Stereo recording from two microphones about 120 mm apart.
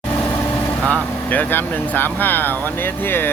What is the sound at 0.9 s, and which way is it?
Speech, 15° left (ahead or behind).